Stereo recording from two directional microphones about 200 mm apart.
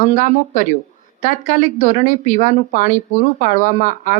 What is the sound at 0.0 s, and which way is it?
Speech, 40° left (ahead or behind).